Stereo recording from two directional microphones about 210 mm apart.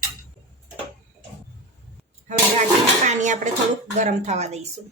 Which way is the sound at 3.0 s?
35° right (ahead or behind).